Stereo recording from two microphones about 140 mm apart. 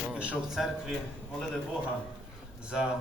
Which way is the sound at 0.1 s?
5° right (ahead or behind).